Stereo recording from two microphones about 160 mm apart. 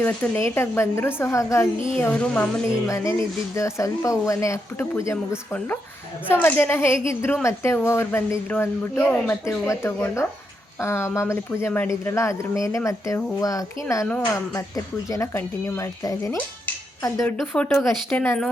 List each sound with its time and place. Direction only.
0.0 s speech: 10° left (ahead or behind)
2.8 s speech: 20° left (ahead or behind)
6.2 s speech: 10° left (ahead or behind)
17.3 s a woman's voice: 5° left (ahead or behind)